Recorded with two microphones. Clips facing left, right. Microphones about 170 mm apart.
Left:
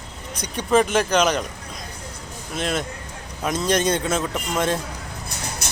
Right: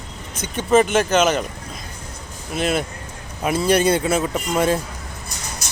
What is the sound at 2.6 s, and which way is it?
A man's voice, 5° right (ahead or behind).